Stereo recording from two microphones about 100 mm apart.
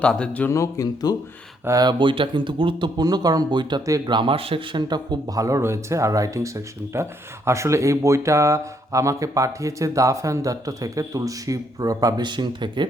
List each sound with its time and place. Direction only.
0.0 s speech: 10° left (ahead or behind)
0.5 s speech: 35° left (ahead or behind)
1.6 s speech: 35° right (ahead or behind)
1.9 s speech: 55° right (ahead or behind)
3.0 s speech: 40° right (ahead or behind); by 4.8 s 65° right (ahead or behind)
4.8 s speech: 45° right (ahead or behind)